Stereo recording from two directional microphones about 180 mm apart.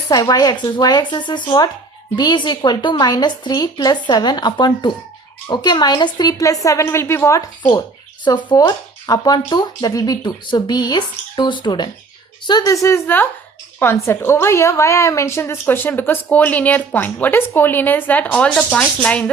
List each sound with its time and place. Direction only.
0.1 s a woman's voice: 20° left (ahead or behind)